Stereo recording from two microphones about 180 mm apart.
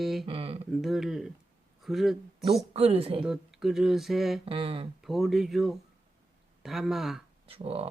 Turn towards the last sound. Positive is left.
turn(degrees=-30)  # may be behind; listen again after turning